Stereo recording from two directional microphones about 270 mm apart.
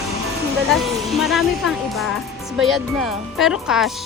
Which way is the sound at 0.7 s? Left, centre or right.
Centre.